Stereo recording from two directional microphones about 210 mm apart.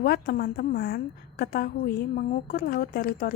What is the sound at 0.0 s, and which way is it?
A woman's voice, 45° left (ahead or behind).